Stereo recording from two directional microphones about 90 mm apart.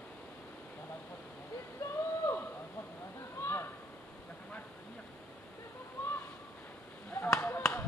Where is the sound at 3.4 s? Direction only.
25° left (ahead or behind).